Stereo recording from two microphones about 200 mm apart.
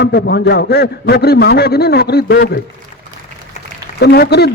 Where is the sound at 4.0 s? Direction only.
55° left (ahead or behind).